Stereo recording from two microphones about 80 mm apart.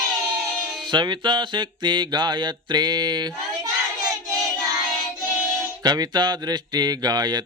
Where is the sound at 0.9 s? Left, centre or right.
Right.